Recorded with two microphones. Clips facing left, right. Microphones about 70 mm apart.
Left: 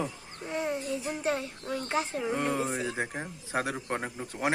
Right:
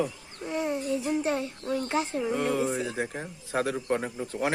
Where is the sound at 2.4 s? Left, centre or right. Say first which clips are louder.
Right 3 dB; centre.